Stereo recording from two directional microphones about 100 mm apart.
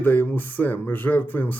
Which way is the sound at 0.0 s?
20° left (ahead or behind).